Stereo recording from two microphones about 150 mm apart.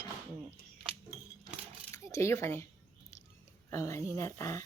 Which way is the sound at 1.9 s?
20° left (ahead or behind).